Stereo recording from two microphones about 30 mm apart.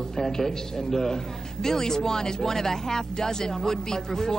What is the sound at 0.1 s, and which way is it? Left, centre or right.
A man's voice, centre.